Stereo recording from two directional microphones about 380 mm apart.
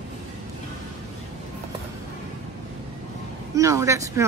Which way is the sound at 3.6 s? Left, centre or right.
Centre.